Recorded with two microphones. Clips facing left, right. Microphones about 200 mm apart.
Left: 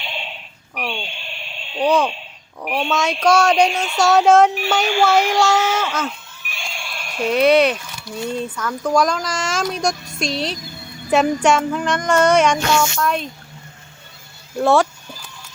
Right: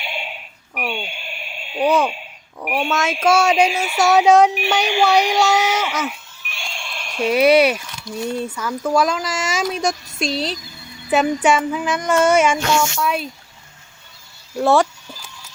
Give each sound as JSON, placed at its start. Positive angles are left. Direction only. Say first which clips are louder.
{"t": 0.0, "sound": "a sound", "louder": "right 1 dB", "side_deg": -10}
{"t": 4.0, "sound": "speech", "louder": "even", "side_deg": -20}
{"t": 4.3, "sound": "speech", "louder": "even", "side_deg": 0}
{"t": 4.5, "sound": "speech", "louder": "even", "side_deg": -15}
{"t": 6.6, "sound": "a sound", "louder": "even", "side_deg": 0}
{"t": 7.2, "sound": "speech", "louder": "right 1 dB", "side_deg": -10}
{"t": 14.5, "sound": "speech", "louder": "even", "side_deg": 0}